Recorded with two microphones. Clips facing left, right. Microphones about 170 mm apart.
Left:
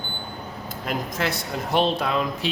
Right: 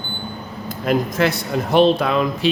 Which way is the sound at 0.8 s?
70° right (ahead or behind).